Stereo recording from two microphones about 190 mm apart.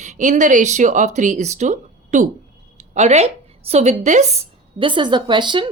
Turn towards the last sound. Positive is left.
turn(degrees=-25)  # may be behind; listen again after turning